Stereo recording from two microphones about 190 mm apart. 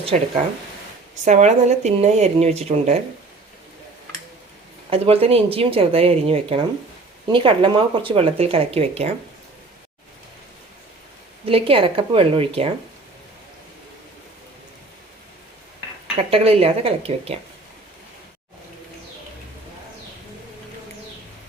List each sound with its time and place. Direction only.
1.1 s speech: 40° right (ahead or behind)
4.9 s speech: 30° right (ahead or behind)
11.4 s speech: 30° right (ahead or behind)
16.1 s speech: 30° right (ahead or behind)